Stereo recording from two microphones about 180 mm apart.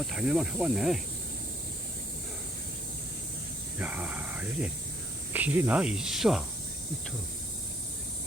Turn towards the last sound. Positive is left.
turn(degrees=-5)  # may be behind; listen again after turning